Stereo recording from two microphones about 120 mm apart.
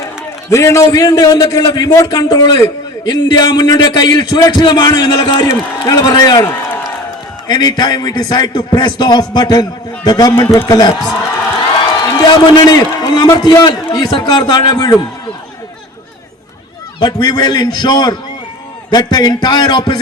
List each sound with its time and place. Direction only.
0.5 s a man's voice: 25° left (ahead or behind)
7.4 s a man's voice: 35° left (ahead or behind)
12.1 s a man's voice: 35° left (ahead or behind)
17.0 s a man's voice: 35° left (ahead or behind)